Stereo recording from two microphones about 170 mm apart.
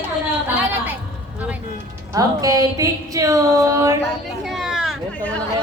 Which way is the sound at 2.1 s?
20° right (ahead or behind).